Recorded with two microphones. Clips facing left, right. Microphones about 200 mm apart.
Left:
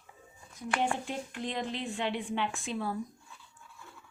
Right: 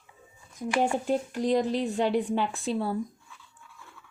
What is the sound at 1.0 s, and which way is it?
Speech, 40° right (ahead or behind).